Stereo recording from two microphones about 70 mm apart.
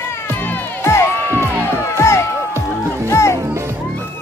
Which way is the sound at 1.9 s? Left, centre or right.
Left.